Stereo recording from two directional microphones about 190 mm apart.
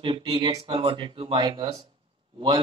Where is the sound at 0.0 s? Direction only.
25° right (ahead or behind).